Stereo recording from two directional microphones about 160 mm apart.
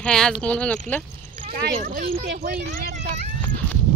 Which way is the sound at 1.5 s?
65° right (ahead or behind).